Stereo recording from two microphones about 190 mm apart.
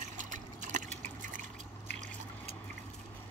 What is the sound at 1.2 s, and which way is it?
Drip, 40° right (ahead or behind).